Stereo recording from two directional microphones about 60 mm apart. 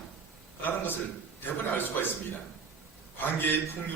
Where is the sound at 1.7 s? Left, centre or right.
Left.